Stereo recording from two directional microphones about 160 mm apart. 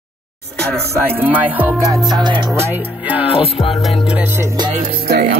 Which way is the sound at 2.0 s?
25° right (ahead or behind).